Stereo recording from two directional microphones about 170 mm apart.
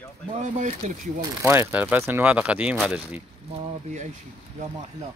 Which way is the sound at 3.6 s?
45° right (ahead or behind).